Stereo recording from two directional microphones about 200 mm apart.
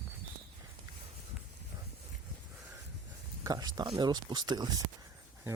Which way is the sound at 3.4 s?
20° right (ahead or behind).